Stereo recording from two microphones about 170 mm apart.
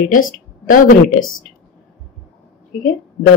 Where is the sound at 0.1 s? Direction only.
50° left (ahead or behind).